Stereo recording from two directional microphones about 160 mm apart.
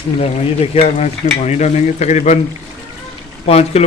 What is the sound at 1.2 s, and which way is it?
Stir, 45° left (ahead or behind).